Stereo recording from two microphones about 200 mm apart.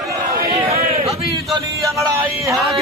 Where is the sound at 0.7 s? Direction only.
30° right (ahead or behind).